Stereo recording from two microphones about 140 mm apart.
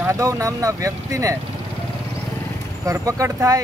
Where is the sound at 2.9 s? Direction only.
25° right (ahead or behind).